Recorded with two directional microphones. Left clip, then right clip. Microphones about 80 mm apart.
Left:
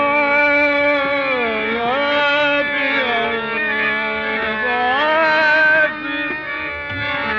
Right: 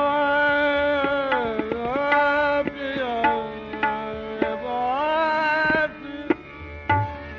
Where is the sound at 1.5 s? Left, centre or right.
Centre.